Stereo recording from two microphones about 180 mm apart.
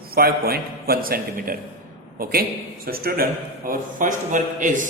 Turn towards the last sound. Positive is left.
turn(degrees=-45)  # may be behind; listen again after turning